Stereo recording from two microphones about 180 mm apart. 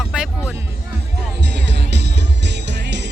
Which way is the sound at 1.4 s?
70° right (ahead or behind).